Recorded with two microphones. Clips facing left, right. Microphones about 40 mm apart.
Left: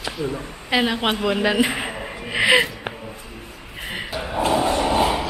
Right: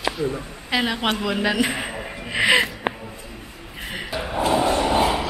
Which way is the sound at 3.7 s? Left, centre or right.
Centre.